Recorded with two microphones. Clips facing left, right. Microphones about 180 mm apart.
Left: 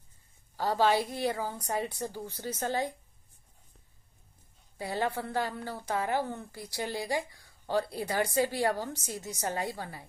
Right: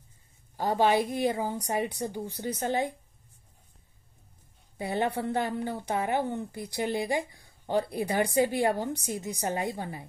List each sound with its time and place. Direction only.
0.6 s a woman's voice: 20° right (ahead or behind)
4.7 s a woman's voice: 20° right (ahead or behind)